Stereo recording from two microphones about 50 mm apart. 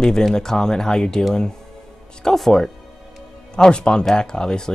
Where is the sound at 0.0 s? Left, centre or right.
Centre.